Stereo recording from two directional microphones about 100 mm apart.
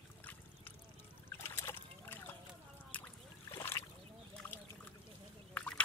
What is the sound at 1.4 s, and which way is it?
Splash, 25° left (ahead or behind).